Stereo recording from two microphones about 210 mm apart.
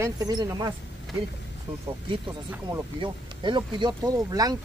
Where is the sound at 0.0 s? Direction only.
20° right (ahead or behind).